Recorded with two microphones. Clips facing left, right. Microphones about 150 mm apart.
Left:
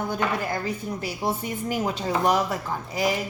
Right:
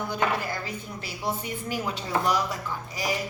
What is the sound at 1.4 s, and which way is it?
Speech, 45° left (ahead or behind).